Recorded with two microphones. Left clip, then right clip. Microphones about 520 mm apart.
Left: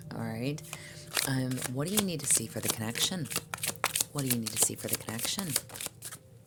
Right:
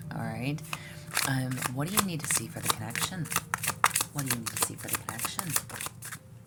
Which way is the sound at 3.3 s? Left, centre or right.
Left.